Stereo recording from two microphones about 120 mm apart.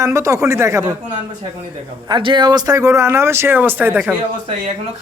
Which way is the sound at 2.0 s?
40° right (ahead or behind).